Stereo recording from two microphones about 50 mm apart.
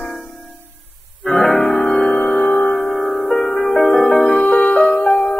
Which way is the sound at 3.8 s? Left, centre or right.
Centre.